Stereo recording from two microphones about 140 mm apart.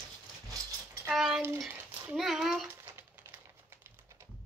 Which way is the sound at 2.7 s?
15° right (ahead or behind).